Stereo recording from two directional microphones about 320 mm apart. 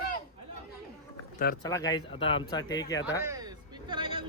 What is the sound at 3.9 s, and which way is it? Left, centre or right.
Vehicle, centre.